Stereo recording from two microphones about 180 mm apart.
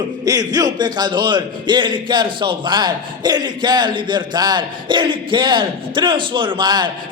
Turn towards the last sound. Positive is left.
turn(degrees=-25)  # may be behind; listen again after turning